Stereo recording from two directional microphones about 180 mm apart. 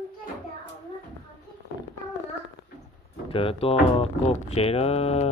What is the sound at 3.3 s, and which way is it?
Speech, 30° left (ahead or behind).